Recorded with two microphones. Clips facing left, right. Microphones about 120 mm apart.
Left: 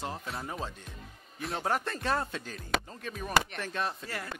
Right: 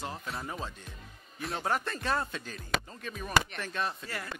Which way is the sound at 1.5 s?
40° left (ahead or behind).